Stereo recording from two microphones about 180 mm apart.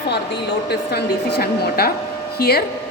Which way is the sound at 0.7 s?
65° left (ahead or behind).